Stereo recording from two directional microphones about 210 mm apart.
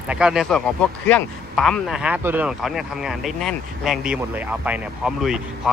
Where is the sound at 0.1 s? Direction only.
5° right (ahead or behind).